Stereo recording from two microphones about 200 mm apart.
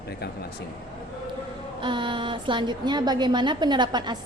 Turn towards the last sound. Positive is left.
turn(degrees=-20)  # may be behind; listen again after turning